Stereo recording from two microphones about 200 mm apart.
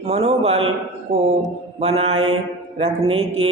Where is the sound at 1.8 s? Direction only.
30° right (ahead or behind).